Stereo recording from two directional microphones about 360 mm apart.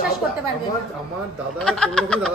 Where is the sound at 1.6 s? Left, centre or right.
Centre.